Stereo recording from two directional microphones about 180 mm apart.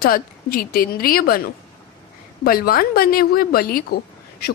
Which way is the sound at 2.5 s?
55° left (ahead or behind).